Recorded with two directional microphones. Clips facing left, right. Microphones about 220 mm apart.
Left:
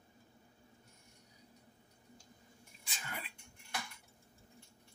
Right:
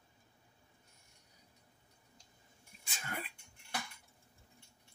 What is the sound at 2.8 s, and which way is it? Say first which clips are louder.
Throat clearing: right 3 dB; 50° right (ahead or behind).